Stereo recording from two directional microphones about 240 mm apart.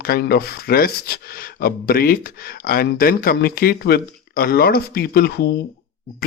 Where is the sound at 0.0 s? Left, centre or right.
Left.